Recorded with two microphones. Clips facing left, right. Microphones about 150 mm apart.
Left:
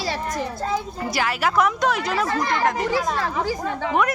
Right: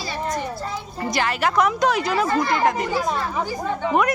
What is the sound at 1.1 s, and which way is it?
A woman's voice, 5° left (ahead or behind).